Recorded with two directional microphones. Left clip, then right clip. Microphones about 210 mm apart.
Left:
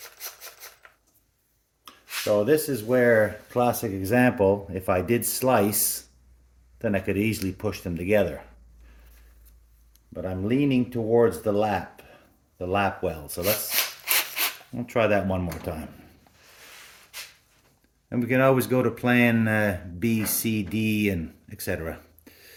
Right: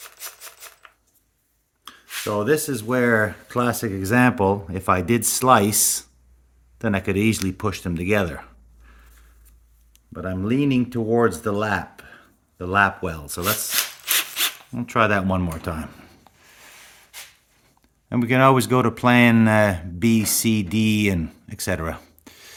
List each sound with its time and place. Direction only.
2.4 s speech: 65° right (ahead or behind)
10.1 s speech: 65° right (ahead or behind)
14.8 s speech: 60° right (ahead or behind)
18.1 s speech: 60° right (ahead or behind)